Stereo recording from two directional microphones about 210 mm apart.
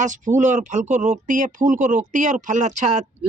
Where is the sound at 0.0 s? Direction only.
35° right (ahead or behind).